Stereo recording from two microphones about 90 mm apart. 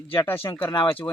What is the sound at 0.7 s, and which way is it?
Speech, 70° left (ahead or behind).